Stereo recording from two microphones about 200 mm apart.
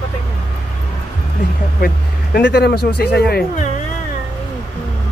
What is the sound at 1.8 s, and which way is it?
A man's voice, 50° left (ahead or behind).